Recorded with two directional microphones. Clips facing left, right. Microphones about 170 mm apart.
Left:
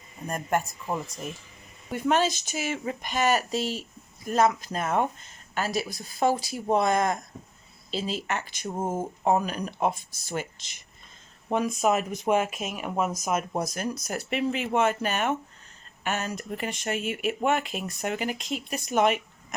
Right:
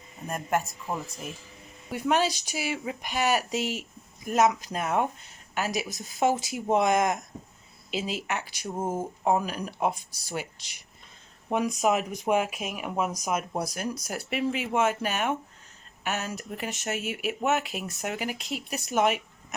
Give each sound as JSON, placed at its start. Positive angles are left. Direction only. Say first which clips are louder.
{"t": 0.3, "sound": "speech", "louder": "left 1 dB", "side_deg": 0}
{"t": 8.7, "sound": "speech", "louder": "left 1 dB", "side_deg": 10}
{"t": 9.2, "sound": "speech", "louder": "left 1 dB", "side_deg": -5}